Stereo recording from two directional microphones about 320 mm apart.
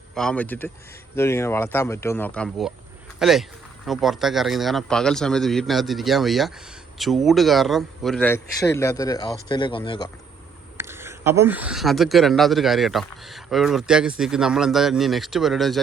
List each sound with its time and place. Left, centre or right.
0.1 s speech: centre
10.8 s speech: centre